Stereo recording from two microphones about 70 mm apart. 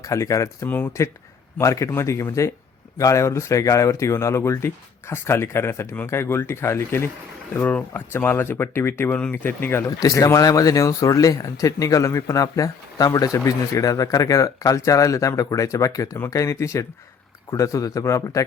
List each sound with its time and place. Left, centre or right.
0.0 s speech: left
7.6 s speech: left
10.0 s speech: left